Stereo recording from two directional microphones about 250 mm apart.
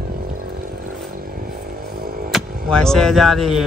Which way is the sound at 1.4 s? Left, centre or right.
Right.